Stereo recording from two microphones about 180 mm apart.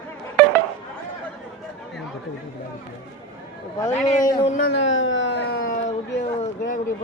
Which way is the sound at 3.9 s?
40° left (ahead or behind).